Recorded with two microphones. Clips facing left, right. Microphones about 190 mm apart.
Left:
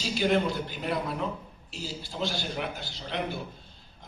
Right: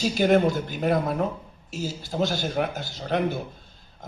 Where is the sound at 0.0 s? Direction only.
45° right (ahead or behind).